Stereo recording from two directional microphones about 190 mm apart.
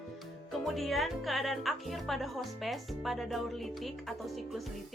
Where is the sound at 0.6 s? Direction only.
Centre (ahead or behind).